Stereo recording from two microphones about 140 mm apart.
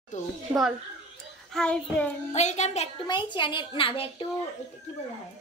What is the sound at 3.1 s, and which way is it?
A woman's voice, 35° left (ahead or behind).